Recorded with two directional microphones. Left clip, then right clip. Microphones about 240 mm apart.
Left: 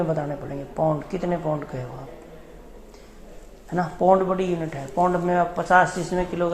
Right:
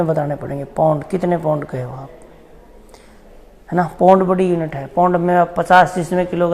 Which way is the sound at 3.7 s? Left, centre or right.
Right.